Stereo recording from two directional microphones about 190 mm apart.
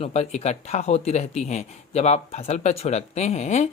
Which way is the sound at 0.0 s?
35° left (ahead or behind).